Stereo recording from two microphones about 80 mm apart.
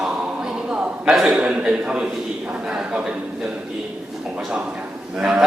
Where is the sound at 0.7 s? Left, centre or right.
Centre.